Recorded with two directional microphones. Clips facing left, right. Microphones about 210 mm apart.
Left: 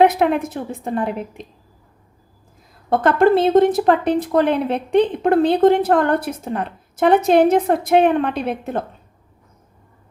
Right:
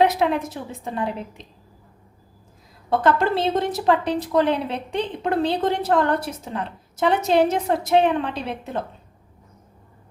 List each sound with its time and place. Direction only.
0.0 s a woman's voice: 55° left (ahead or behind)
2.9 s speech: 55° left (ahead or behind)